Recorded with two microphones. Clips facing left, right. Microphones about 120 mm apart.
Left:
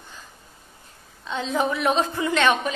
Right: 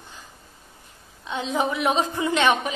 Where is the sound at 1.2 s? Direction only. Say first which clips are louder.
Left 1 dB; 15° right (ahead or behind).